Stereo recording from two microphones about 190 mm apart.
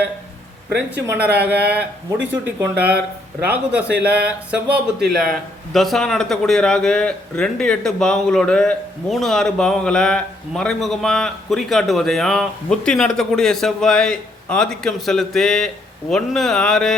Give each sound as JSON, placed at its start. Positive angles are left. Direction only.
{"t": 0.9, "sound": "speech", "side_deg": -10}
{"t": 1.5, "sound": "speech", "side_deg": -60}
{"t": 2.3, "sound": "speech", "side_deg": -10}